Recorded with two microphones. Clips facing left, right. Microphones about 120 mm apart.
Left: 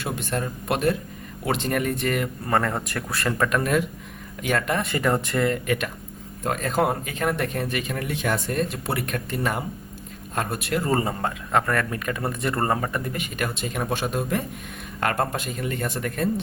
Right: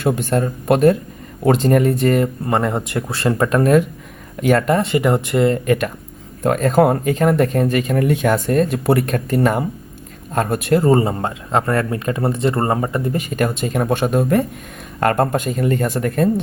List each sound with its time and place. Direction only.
0.0 s speech: 45° right (ahead or behind)
2.5 s speech: 20° right (ahead or behind)
5.5 s speech: 40° right (ahead or behind)
10.8 s speech: 25° right (ahead or behind)
13.1 s speech: 40° right (ahead or behind)